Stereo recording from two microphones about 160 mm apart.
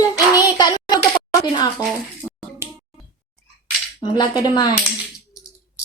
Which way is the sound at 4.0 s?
25° left (ahead or behind).